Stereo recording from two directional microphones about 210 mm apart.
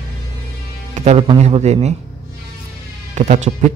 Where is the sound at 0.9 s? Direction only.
30° right (ahead or behind).